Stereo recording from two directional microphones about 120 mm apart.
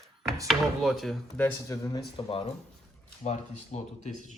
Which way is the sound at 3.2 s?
70° left (ahead or behind).